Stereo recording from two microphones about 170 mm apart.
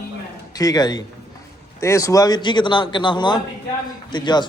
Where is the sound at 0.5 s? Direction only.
20° left (ahead or behind).